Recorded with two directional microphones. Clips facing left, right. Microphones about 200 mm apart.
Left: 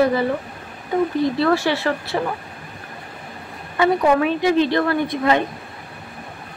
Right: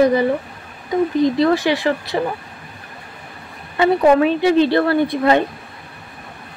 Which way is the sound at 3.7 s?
30° right (ahead or behind).